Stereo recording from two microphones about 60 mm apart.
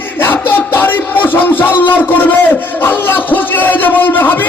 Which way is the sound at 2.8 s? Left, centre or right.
Left.